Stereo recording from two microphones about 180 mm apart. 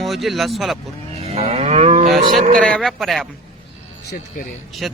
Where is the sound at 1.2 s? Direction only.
35° right (ahead or behind).